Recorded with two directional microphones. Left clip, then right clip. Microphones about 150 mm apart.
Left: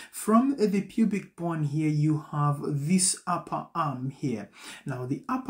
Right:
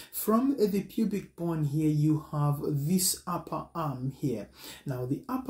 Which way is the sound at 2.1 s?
15° left (ahead or behind).